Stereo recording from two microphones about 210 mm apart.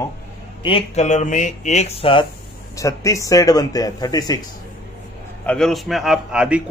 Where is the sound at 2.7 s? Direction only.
15° left (ahead or behind).